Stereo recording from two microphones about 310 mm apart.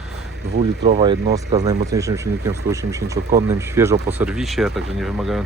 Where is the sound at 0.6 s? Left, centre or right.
Right.